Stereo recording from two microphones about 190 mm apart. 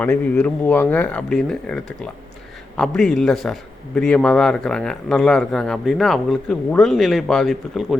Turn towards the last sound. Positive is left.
turn(degrees=0)  # may be behind; listen again after turning